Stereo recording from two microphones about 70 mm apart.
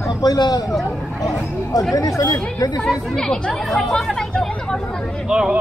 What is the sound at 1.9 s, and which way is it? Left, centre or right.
Speech, left.